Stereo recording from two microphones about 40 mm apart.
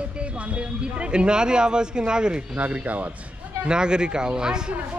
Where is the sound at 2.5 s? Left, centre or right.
Right.